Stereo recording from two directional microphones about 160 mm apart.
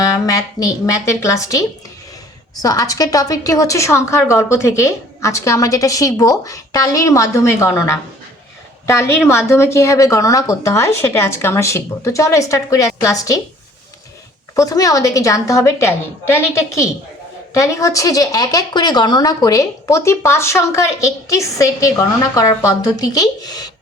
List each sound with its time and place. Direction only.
0.0 s a woman's voice: 20° left (ahead or behind)
14.5 s speech: 20° left (ahead or behind)